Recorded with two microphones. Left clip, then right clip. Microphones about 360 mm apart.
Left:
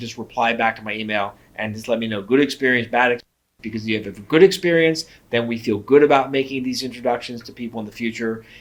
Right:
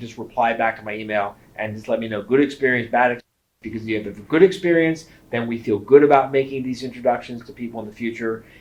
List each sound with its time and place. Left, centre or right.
0.0 s speech: left